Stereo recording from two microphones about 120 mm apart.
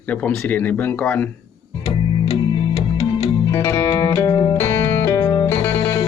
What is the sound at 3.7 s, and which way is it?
Music, 20° left (ahead or behind).